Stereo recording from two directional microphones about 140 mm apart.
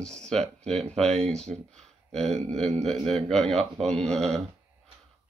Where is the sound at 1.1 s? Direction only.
50° right (ahead or behind).